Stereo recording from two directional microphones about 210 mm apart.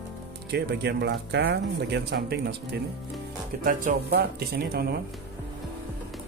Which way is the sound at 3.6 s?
40° right (ahead or behind).